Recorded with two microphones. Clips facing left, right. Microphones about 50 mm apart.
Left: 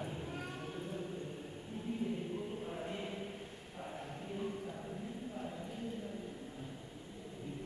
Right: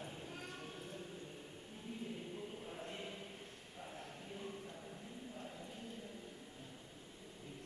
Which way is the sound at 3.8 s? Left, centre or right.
Centre.